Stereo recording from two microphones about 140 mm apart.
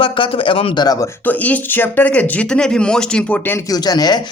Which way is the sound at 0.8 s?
25° left (ahead or behind).